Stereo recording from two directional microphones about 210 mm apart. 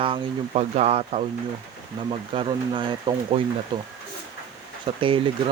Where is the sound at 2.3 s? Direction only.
25° right (ahead or behind).